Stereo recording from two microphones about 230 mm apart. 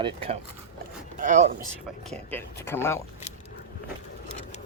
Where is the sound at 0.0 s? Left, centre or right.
Right.